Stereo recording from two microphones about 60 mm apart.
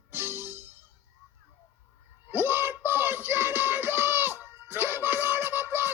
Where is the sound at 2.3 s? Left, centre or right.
Right.